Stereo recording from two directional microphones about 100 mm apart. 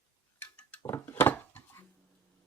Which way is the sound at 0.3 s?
15° left (ahead or behind).